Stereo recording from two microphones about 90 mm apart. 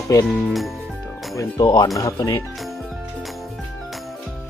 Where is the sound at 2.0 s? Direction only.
40° left (ahead or behind).